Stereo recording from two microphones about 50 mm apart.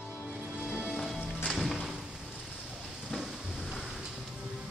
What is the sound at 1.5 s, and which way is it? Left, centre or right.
Music, centre.